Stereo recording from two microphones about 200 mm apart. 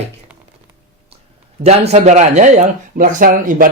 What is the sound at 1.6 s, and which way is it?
Speech, 30° right (ahead or behind).